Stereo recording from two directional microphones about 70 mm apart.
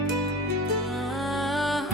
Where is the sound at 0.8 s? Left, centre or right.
Centre.